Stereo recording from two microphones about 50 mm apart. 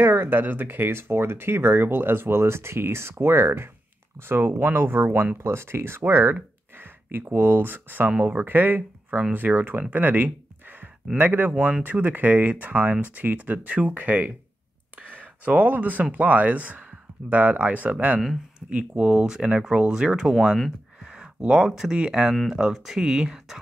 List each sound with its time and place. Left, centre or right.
0.0 s speech: right; by 20.4 s centre
21.0 s a sound: centre
21.9 s speech: centre